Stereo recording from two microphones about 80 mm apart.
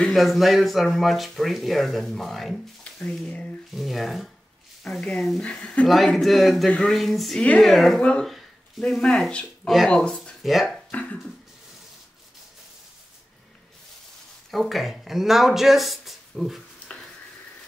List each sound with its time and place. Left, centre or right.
0.0 s speech: centre
2.8 s a sound: centre
3.7 s speech: centre
7.3 s speech: centre
8.3 s a sound: centre
8.8 s speech: centre
10.4 s speech: centre
10.9 s a sound: centre
14.5 s speech: centre